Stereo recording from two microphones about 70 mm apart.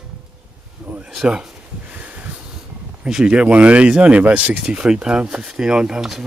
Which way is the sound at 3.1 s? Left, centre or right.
Centre.